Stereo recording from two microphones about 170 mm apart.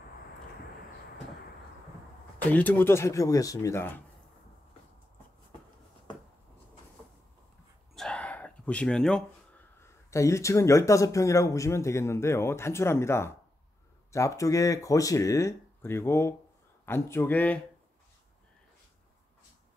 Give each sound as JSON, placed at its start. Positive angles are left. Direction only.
{"t": 2.3, "sound": "speech", "side_deg": 10}
{"t": 7.9, "sound": "a sound", "side_deg": 5}
{"t": 9.8, "sound": "speech", "side_deg": 15}